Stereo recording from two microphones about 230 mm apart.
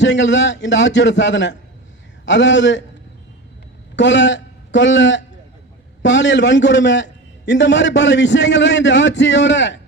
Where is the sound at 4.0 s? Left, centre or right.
Left.